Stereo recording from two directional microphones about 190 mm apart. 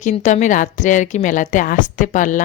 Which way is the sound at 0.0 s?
40° left (ahead or behind).